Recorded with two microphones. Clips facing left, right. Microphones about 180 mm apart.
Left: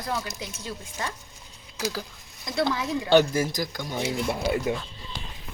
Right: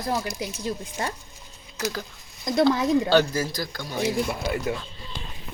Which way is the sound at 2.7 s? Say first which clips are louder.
Right 7 dB; 45° right (ahead or behind).